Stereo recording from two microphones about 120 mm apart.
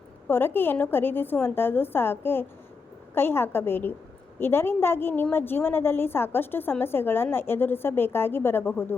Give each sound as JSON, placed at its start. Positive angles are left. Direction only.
{"t": 0.3, "sound": "a woman's voice", "side_deg": 15}